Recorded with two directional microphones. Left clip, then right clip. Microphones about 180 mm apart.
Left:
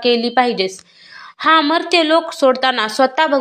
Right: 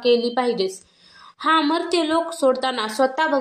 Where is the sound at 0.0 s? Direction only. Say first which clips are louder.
Left 4 dB; 20° left (ahead or behind).